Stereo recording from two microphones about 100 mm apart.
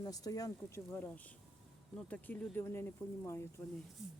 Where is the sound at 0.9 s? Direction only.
15° left (ahead or behind).